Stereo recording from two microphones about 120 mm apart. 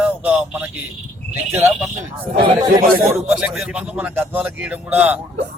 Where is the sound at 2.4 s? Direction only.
40° right (ahead or behind).